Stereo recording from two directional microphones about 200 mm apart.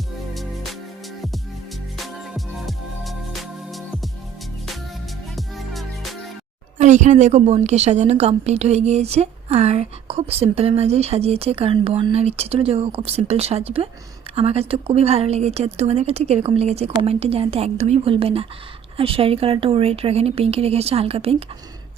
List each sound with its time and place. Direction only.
0.3 s music: centre (ahead or behind)
2.1 s music: centre (ahead or behind)
5.4 s music: centre (ahead or behind)
6.7 s a woman's voice: 35° right (ahead or behind)